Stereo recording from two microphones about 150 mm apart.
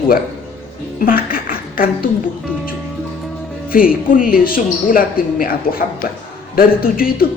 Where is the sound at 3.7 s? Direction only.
70° left (ahead or behind).